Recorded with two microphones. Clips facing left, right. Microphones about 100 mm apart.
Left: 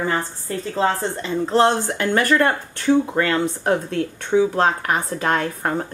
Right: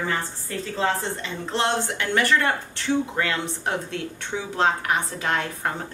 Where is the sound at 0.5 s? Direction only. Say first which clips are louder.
Left 4 dB; 35° left (ahead or behind).